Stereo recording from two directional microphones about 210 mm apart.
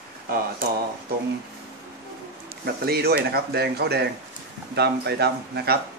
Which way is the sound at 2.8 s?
50° right (ahead or behind).